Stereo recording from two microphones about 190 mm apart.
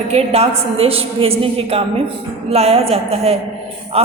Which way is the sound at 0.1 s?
30° right (ahead or behind).